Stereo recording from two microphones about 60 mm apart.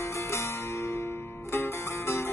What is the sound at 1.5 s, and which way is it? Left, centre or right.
Music, left.